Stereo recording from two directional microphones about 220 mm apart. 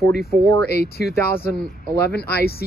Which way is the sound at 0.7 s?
45° left (ahead or behind).